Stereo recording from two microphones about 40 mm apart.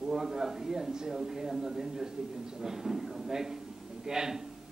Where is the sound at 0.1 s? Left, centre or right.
Centre.